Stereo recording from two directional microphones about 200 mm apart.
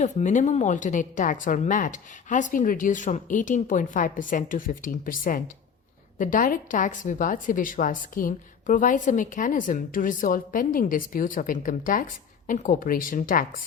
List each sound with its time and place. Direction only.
0.0 s a woman's voice: 40° left (ahead or behind)